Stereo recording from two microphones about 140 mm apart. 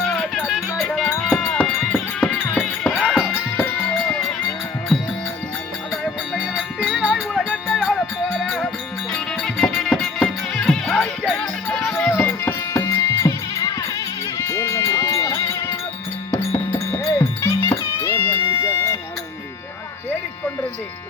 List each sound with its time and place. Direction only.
0.1 s music: 5° left (ahead or behind)
3.6 s music: 15° left (ahead or behind)
4.9 s music: 5° right (ahead or behind)
7.3 s music: 5° left (ahead or behind)
11.8 s music: 15° left (ahead or behind)
14.3 s sheep: 20° left (ahead or behind)
16.3 s music: 20° left (ahead or behind)